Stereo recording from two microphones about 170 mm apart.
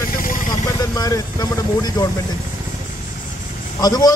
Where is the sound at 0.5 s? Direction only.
20° left (ahead or behind).